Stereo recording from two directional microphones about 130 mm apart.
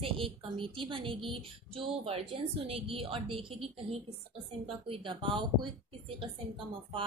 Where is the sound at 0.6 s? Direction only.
40° right (ahead or behind).